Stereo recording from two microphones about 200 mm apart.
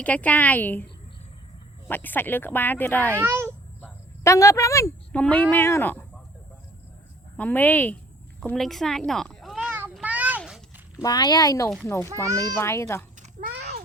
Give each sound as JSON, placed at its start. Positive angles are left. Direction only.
{"t": 0.0, "sound": "speech", "side_deg": 5}
{"t": 1.9, "sound": "speech", "side_deg": 10}
{"t": 3.2, "sound": "a child's voice", "side_deg": -10}
{"t": 3.8, "sound": "a sound", "side_deg": 10}
{"t": 5.2, "sound": "speech", "side_deg": 5}
{"t": 7.3, "sound": "speech", "side_deg": 10}
{"t": 9.9, "sound": "a sound", "side_deg": -5}
{"t": 11.0, "sound": "speech", "side_deg": 20}
{"t": 13.4, "sound": "a sound", "side_deg": -50}